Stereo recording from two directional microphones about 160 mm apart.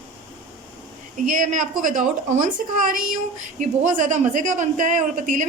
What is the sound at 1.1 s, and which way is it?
A woman's voice, 50° right (ahead or behind).